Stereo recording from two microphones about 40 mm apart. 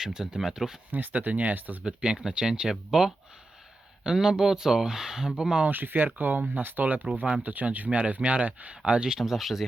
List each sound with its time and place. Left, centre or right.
0.0 s speech: centre
0.9 s speech: right
1.8 s speech: right
5.7 s speech: right
6.6 s speech: right
7.9 s speech: right
8.8 s speech: right
9.1 s speech: centre